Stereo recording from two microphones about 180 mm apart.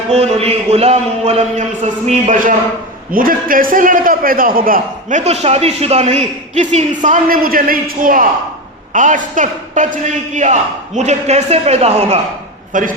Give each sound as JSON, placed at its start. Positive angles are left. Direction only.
{"t": 0.1, "sound": "a man's voice", "side_deg": -35}
{"t": 12.7, "sound": "a man's voice", "side_deg": -45}